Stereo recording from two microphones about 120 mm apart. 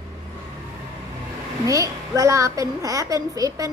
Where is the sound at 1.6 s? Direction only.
30° right (ahead or behind).